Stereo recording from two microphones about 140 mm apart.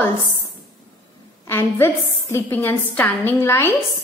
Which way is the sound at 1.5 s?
20° left (ahead or behind).